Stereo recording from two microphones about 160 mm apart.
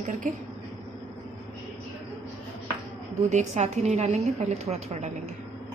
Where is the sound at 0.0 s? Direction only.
50° right (ahead or behind).